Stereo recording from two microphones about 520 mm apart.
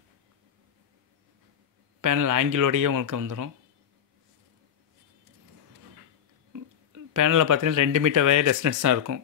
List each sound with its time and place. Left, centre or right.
2.0 s speech: right
6.5 s speech: right